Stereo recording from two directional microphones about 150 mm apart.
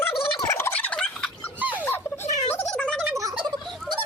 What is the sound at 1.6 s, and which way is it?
Fowl, 10° right (ahead or behind).